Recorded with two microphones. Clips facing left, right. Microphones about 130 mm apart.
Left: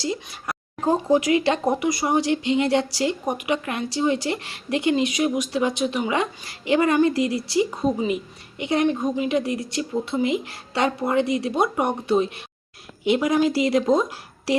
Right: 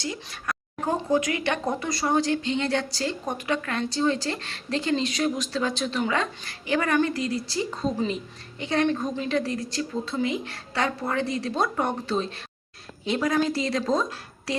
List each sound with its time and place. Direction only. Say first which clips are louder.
0.4 s speech: left 5 dB; 25° left (ahead or behind)